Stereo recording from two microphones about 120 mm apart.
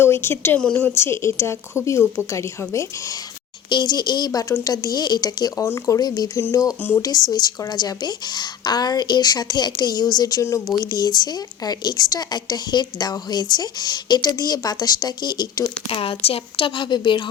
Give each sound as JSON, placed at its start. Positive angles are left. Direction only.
{"t": 0.0, "sound": "speech", "side_deg": 20}
{"t": 3.7, "sound": "a woman's voice", "side_deg": 35}
{"t": 16.0, "sound": "a woman's voice", "side_deg": 50}